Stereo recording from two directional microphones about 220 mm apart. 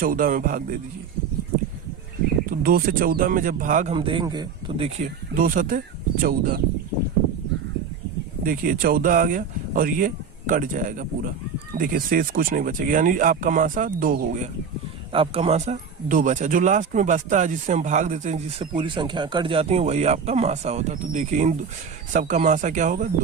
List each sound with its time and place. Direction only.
0.0 s speech: 40° right (ahead or behind)
2.5 s speech: 40° right (ahead or behind)
3.9 s speech: 20° right (ahead or behind)
4.9 s speech: 40° right (ahead or behind)
8.4 s speech: 40° right (ahead or behind)
15.1 s speech: 25° right (ahead or behind)
18.6 s speech: 20° right (ahead or behind)